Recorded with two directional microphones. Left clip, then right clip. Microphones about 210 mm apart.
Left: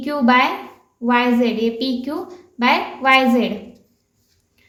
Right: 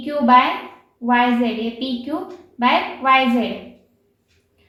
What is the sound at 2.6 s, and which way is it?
Speech, 55° left (ahead or behind).